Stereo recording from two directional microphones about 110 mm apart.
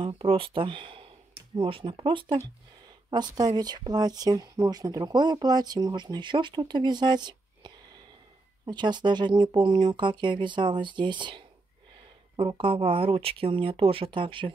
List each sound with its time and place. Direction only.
0.0 s speech: 55° right (ahead or behind)
3.1 s speech: 40° right (ahead or behind)
8.6 s speech: 40° right (ahead or behind)